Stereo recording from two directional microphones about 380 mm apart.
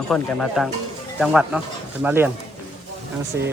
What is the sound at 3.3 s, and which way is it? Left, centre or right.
Speech, right.